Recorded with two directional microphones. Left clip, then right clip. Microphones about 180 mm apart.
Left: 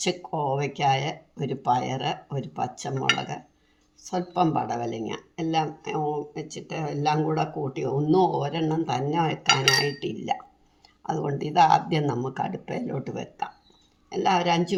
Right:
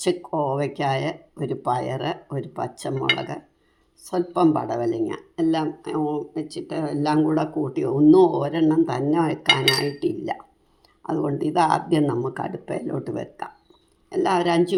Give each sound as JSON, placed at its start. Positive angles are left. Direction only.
{"t": 0.0, "sound": "speech", "side_deg": -25}
{"t": 9.5, "sound": "speech", "side_deg": -10}
{"t": 10.0, "sound": "speech", "side_deg": -30}